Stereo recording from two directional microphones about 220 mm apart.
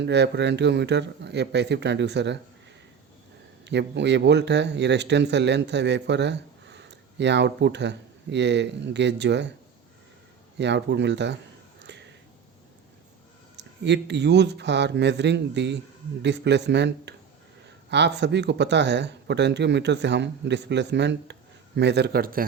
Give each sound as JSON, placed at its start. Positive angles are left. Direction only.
{"t": 0.0, "sound": "speech", "side_deg": -50}
{"t": 3.6, "sound": "speech", "side_deg": -50}
{"t": 10.6, "sound": "speech", "side_deg": -50}
{"t": 11.8, "sound": "a sound", "side_deg": -50}
{"t": 13.6, "sound": "speech", "side_deg": -50}